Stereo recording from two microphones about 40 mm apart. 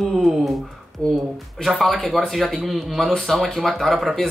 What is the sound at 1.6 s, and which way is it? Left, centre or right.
Speech, centre.